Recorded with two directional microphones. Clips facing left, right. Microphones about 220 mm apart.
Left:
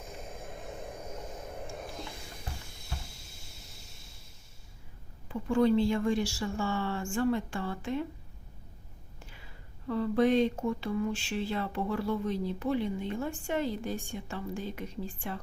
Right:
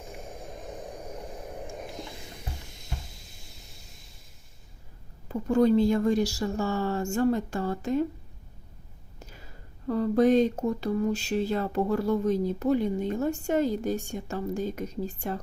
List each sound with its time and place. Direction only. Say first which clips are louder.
0.7 s vehicle: right 2 dB; 15° right (ahead or behind)
1.6 s a sound: right 2 dB; 15° right (ahead or behind)
5.3 s speech: right 4 dB; 40° right (ahead or behind)
9.1 s speech: right 5 dB; 40° right (ahead or behind)